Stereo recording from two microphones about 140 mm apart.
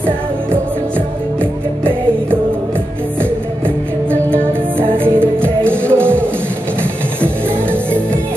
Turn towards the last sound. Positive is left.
turn(degrees=-15)  # may be behind; listen again after turning